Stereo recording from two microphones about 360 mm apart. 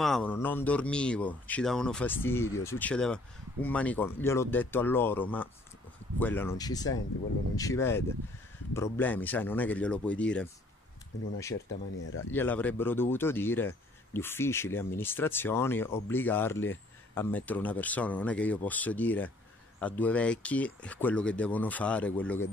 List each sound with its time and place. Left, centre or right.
0.0 s speech: centre
12.0 s speech: left
12.3 s speech: centre